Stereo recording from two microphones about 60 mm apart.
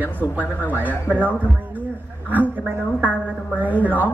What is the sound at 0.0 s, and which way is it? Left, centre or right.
Speech, right.